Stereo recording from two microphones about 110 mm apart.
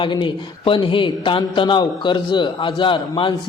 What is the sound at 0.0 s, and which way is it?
A man's voice, 45° left (ahead or behind).